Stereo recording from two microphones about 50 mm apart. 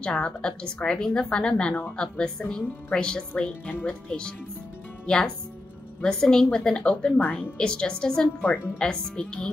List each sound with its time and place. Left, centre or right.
0.0 s a woman's voice: centre
7.2 s speech: left
7.5 s a woman's voice: centre